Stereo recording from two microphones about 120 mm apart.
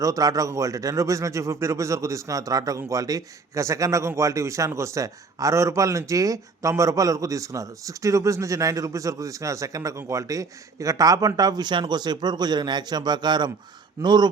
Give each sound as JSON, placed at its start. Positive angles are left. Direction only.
{"t": 0.0, "sound": "a man's voice", "side_deg": -30}